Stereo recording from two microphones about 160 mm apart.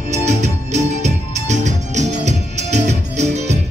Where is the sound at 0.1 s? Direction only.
45° right (ahead or behind).